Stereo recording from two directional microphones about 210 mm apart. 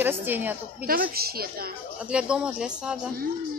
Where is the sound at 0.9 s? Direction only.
45° right (ahead or behind).